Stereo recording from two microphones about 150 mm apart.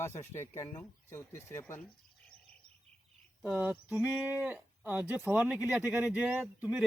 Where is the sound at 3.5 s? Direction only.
10° right (ahead or behind).